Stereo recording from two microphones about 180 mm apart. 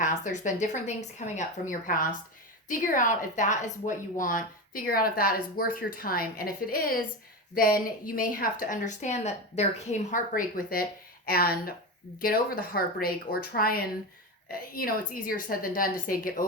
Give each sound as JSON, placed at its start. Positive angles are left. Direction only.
{"t": 0.0, "sound": "a woman's voice", "side_deg": 45}